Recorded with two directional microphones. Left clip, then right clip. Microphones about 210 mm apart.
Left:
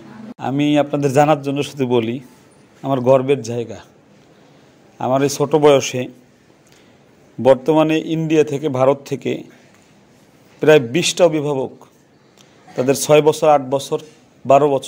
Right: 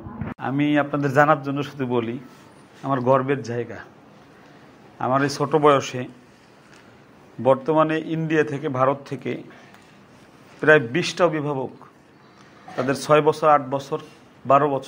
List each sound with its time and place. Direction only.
0.4 s a man's voice: 55° left (ahead or behind)
4.9 s a man's voice: 50° left (ahead or behind)
7.5 s a man's voice: 50° left (ahead or behind)
10.6 s a man's voice: 55° left (ahead or behind)
12.7 s a man's voice: 50° left (ahead or behind)